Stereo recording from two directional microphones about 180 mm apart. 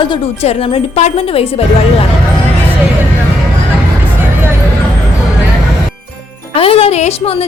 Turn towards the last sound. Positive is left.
turn(degrees=35)  # may be behind; listen again after turning